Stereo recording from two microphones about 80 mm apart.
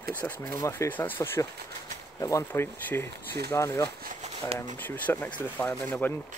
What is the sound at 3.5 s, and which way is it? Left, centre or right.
Speech, left.